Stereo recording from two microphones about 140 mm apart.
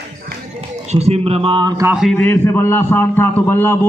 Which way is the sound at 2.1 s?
15° left (ahead or behind).